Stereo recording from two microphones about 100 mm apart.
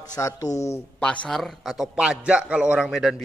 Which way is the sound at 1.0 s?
10° left (ahead or behind).